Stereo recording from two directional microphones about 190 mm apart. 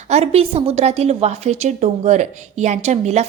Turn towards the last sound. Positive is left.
turn(degrees=-35)  # may be behind; listen again after turning